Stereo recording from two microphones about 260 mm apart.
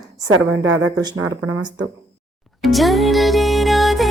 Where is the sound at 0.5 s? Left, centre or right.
Right.